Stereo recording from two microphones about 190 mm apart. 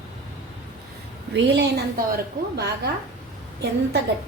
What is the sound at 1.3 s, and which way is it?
Speech, 65° right (ahead or behind).